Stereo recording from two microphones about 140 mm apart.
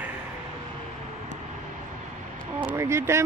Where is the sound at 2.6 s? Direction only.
20° right (ahead or behind).